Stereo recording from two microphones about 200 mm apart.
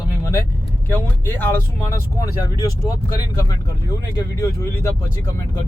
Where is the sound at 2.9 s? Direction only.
15° left (ahead or behind).